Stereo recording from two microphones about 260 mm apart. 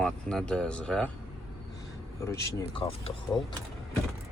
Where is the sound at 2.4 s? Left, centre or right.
Centre.